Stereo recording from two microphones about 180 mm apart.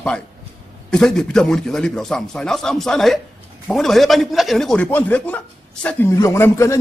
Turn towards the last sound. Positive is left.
turn(degrees=15)  # may be behind; listen again after turning